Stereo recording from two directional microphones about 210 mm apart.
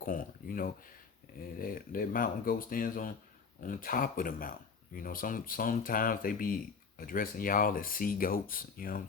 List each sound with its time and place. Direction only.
0.0 s speech: 40° left (ahead or behind)